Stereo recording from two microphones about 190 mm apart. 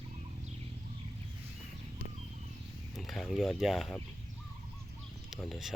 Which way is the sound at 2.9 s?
Centre (ahead or behind).